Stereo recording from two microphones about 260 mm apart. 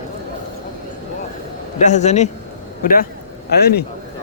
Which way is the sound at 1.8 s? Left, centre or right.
Left.